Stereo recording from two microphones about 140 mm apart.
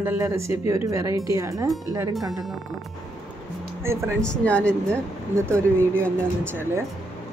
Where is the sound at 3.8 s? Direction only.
20° right (ahead or behind).